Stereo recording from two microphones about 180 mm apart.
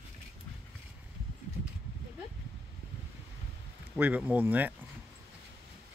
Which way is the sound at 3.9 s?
10° right (ahead or behind).